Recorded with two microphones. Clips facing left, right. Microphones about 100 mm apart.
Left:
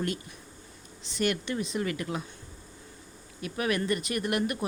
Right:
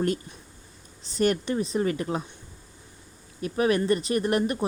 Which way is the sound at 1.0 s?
40° right (ahead or behind).